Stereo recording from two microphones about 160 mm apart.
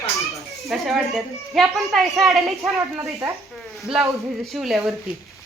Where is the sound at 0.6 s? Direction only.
Centre (ahead or behind).